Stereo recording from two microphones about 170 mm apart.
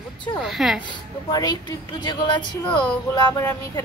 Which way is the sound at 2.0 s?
25° left (ahead or behind).